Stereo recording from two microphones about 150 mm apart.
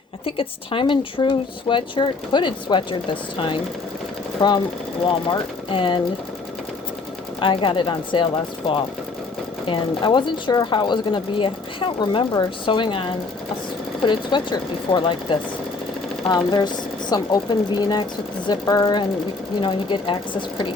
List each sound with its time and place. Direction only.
0.3 s speech: 35° left (ahead or behind)
7.4 s speech: 35° left (ahead or behind)
14.1 s speech: 30° left (ahead or behind)